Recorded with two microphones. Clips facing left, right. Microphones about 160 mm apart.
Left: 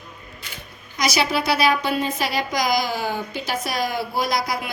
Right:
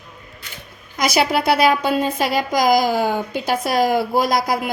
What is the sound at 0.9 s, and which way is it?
A woman's voice, 55° right (ahead or behind).